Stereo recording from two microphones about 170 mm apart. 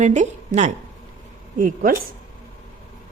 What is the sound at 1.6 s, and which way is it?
Speech, 50° right (ahead or behind).